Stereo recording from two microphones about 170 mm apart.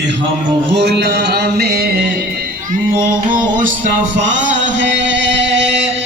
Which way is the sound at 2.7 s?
55° right (ahead or behind).